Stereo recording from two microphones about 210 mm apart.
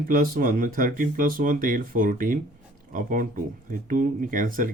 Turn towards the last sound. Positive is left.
turn(degrees=-40)  # may be behind; listen again after turning